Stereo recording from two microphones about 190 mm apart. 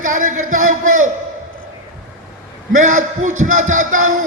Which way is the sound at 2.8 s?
40° right (ahead or behind).